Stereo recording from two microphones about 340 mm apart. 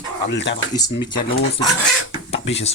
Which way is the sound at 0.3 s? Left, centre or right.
Left.